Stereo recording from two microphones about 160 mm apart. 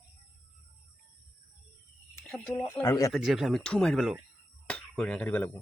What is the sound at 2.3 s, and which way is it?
Speech, 5° left (ahead or behind).